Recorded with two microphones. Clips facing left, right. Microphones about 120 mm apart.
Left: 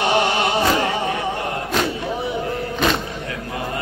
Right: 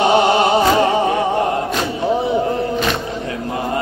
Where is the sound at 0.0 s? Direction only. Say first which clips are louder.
Right 6 dB; 25° right (ahead or behind).